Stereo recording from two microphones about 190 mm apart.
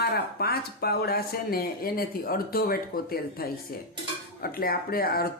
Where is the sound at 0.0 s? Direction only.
55° left (ahead or behind).